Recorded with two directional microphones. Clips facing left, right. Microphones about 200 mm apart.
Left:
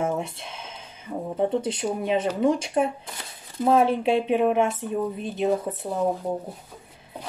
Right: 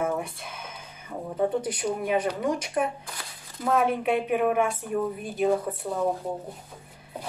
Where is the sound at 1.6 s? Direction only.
25° left (ahead or behind).